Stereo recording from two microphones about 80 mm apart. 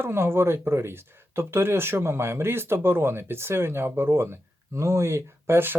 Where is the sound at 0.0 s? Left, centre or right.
Right.